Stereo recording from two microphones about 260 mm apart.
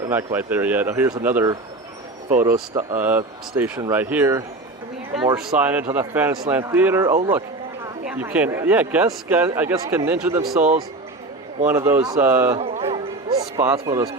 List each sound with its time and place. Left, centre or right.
0.1 s speech: centre
11.7 s speech: centre
12.5 s music: right
13.6 s speech: centre